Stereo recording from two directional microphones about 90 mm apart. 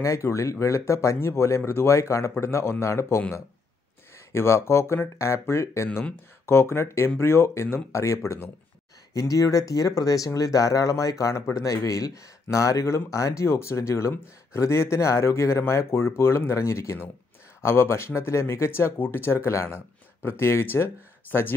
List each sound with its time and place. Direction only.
0.0 s speech: 35° left (ahead or behind)